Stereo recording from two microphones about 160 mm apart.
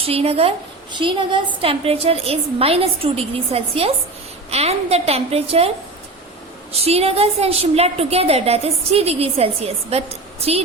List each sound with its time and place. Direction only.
0.0 s a woman's voice: 40° right (ahead or behind)
6.7 s a woman's voice: 40° right (ahead or behind)